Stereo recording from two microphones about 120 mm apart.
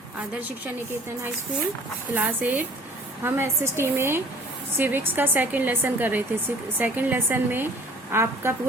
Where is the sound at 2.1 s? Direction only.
15° right (ahead or behind).